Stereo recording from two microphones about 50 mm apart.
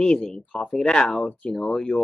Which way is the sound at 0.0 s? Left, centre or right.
Centre.